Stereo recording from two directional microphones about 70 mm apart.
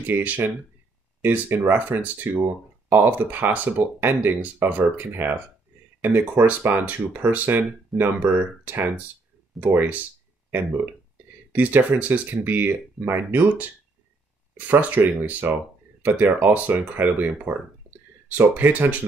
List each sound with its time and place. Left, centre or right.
0.0 s speech: right
11.5 s speech: right
14.7 s speech: right